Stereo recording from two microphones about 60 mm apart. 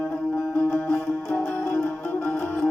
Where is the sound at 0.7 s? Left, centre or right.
Centre.